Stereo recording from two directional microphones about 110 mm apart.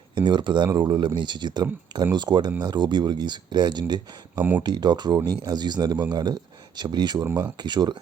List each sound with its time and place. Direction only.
0.1 s speech: 45° right (ahead or behind)
4.4 s speech: 15° right (ahead or behind)
4.6 s speech: 40° right (ahead or behind)